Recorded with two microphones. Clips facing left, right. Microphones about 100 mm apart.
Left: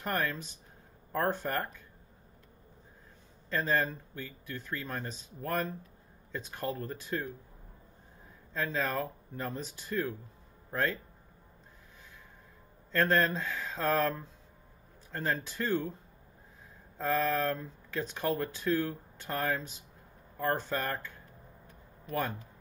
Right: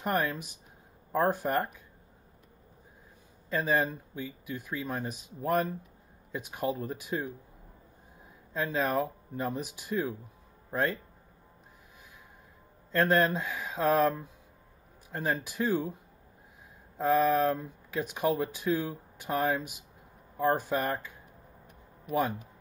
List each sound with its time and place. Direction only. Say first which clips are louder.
0.0 s speech: right 3 dB; 10° right (ahead or behind)
3.4 s speech: right 2 dB; 10° right (ahead or behind)
8.5 s speech: right 4 dB; 15° right (ahead or behind)
12.9 s speech: right 2 dB; 10° right (ahead or behind)
17.0 s speech: right 5 dB; 15° right (ahead or behind)
21.6 s a sound: right 4 dB; 15° right (ahead or behind)